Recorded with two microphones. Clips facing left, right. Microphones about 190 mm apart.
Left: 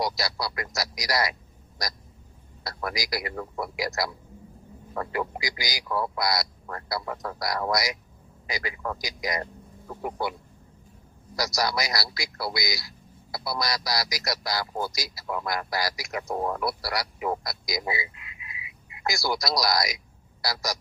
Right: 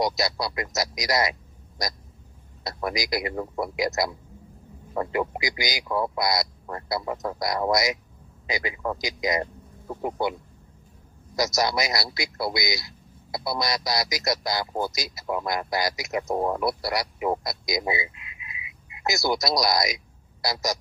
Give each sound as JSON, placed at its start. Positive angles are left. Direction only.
{"t": 0.0, "sound": "speech", "side_deg": -20}
{"t": 2.6, "sound": "speech", "side_deg": -20}
{"t": 11.3, "sound": "speech", "side_deg": -20}